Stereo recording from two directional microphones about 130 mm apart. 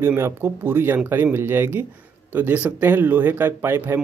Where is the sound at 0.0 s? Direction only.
20° right (ahead or behind).